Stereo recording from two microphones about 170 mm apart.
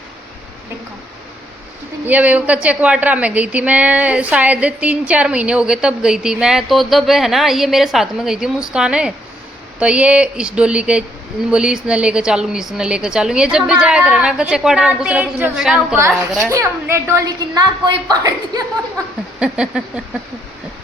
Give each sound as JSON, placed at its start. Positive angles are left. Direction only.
{"t": 2.0, "sound": "a woman's voice", "side_deg": -10}
{"t": 16.5, "sound": "a woman's voice", "side_deg": -15}
{"t": 19.4, "sound": "a woman's voice", "side_deg": -5}